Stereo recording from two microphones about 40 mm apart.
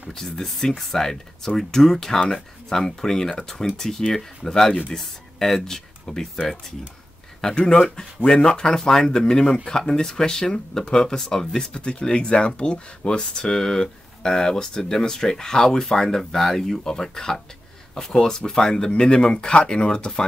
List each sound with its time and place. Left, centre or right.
0.1 s speech: centre